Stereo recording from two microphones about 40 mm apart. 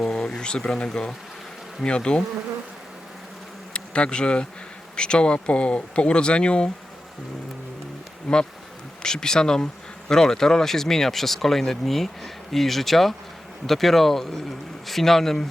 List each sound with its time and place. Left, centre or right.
0.0 s a sound: centre
0.9 s speech: centre
3.7 s bee: left
4.9 s speech: left
8.3 s speech: centre